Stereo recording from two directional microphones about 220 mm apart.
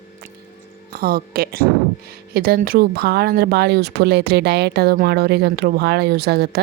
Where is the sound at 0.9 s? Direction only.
45° right (ahead or behind).